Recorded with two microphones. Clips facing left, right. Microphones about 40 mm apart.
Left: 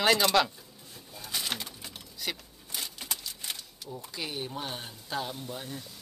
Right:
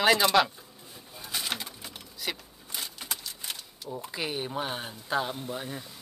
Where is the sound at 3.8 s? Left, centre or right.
Right.